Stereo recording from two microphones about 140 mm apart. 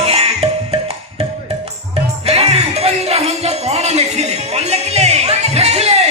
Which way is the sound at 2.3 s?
45° right (ahead or behind).